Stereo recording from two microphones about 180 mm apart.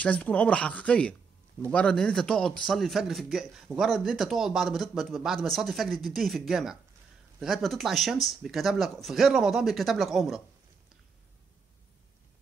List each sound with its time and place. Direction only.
0.0 s a man's voice: 5° left (ahead or behind)